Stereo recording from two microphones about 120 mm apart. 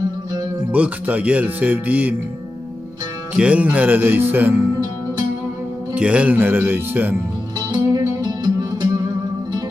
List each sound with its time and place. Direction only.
0.7 s speech: 15° right (ahead or behind)
3.3 s speech: 10° right (ahead or behind)
5.9 s speech: 10° right (ahead or behind)
7.7 s music: 35° right (ahead or behind)